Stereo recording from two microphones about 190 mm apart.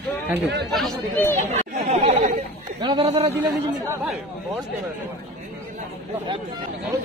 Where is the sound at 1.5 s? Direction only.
35° right (ahead or behind).